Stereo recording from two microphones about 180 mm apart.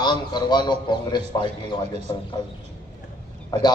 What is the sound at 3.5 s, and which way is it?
Speech, 25° left (ahead or behind).